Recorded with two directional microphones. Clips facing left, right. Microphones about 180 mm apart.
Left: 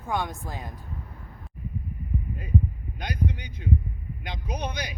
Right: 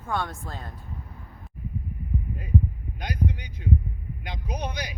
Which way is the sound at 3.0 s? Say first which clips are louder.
Even; 10° right (ahead or behind).